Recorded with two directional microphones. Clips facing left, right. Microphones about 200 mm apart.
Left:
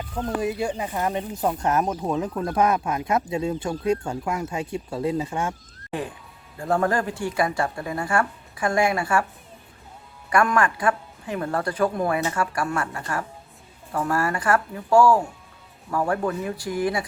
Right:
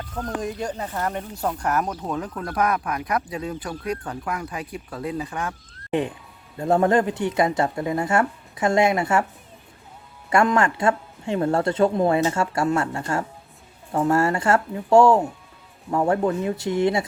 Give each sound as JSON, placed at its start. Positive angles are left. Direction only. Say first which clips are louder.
{"t": 0.3, "sound": "speech", "louder": "left 3 dB", "side_deg": 10}
{"t": 6.6, "sound": "speech", "louder": "right 4 dB", "side_deg": -20}
{"t": 10.2, "sound": "speech", "louder": "right 2 dB", "side_deg": -25}